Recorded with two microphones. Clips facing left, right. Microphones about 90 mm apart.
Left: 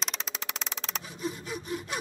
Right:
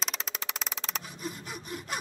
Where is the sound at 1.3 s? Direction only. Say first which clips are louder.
Left 4 dB; 50° right (ahead or behind).